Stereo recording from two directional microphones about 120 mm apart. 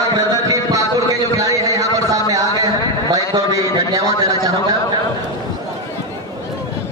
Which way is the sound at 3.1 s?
30° right (ahead or behind).